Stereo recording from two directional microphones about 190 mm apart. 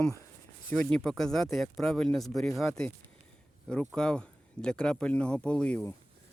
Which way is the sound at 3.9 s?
5° left (ahead or behind).